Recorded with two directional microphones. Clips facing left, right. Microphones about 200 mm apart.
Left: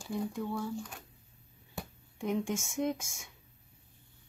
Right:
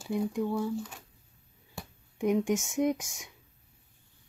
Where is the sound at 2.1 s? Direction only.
15° right (ahead or behind).